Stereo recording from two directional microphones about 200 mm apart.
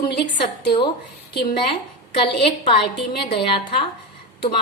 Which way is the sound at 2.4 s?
25° left (ahead or behind).